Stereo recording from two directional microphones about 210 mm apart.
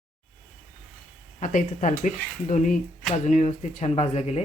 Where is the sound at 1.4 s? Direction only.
35° left (ahead or behind).